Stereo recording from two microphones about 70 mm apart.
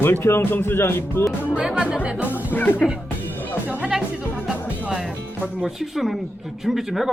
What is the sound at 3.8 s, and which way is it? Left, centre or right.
Speech, centre.